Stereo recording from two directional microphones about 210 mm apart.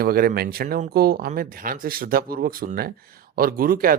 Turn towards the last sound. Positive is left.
turn(degrees=-45)  # may be behind; listen again after turning